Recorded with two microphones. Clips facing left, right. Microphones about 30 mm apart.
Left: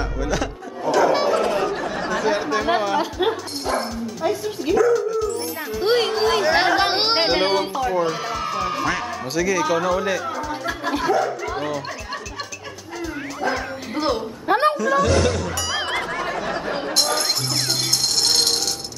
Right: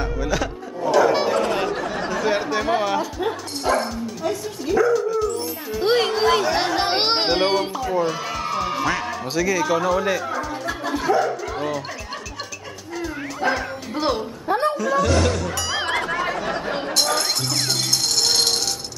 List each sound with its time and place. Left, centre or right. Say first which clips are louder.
0.0 s a sound: even; centre
0.9 s music: even; centre
1.7 s chatter: left 1 dB; centre
3.6 s bow-wow: right 3 dB; centre
4.2 s bow-wow: left 4 dB; centre
4.9 s howl: even; centre
6.4 s chatter: left 3 dB; left
6.7 s music: left 2 dB; centre
11.1 s speech: right 1 dB; centre
11.5 s music: even; centre
13.5 s music: right 2 dB; centre
14.5 s a sound: left 3 dB; left
14.8 s chatter: left 1 dB; centre
18.2 s a sound: even; centre